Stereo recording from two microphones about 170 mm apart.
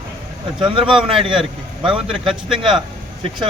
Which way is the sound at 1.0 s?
30° right (ahead or behind).